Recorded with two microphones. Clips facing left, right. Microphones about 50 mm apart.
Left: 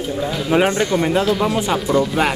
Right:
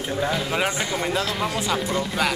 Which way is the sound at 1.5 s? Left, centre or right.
Left.